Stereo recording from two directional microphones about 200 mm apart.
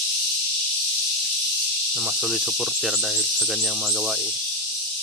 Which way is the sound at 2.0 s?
5° right (ahead or behind).